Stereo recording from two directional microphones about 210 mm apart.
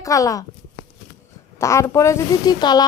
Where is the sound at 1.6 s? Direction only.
15° left (ahead or behind).